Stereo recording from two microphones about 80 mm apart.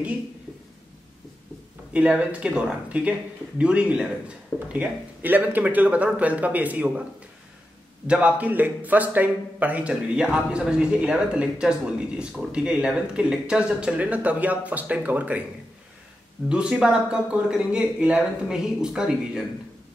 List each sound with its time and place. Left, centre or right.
1.9 s speech: centre
8.1 s speech: centre
16.4 s speech: centre